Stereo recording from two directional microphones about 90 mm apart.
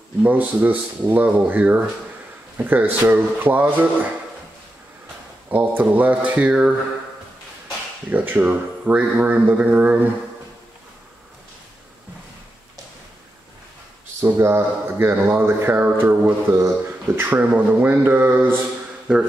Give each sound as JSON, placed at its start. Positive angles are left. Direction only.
{"t": 0.2, "sound": "speech", "side_deg": -20}
{"t": 5.5, "sound": "speech", "side_deg": -20}
{"t": 8.1, "sound": "speech", "side_deg": -20}
{"t": 14.2, "sound": "speech", "side_deg": -30}